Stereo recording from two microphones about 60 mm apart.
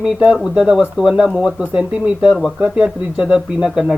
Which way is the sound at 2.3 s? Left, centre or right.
Centre.